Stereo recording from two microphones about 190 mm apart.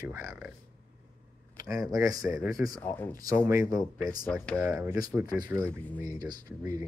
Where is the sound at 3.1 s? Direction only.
20° right (ahead or behind).